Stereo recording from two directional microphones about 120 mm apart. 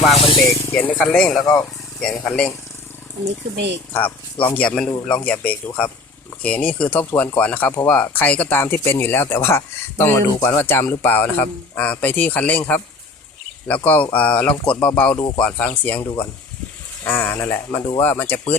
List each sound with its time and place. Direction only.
0.3 s speech: 30° left (ahead or behind); by 2.5 s 5° left (ahead or behind)
3.9 s speech: 15° left (ahead or behind)
17.1 s speech: 15° left (ahead or behind)